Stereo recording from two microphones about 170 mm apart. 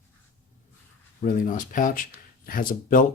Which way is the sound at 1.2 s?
50° left (ahead or behind).